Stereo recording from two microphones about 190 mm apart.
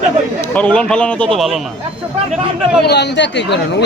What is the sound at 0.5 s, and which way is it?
A man's voice, 5° left (ahead or behind).